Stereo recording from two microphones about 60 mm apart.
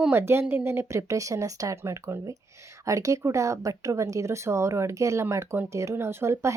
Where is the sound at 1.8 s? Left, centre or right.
Right.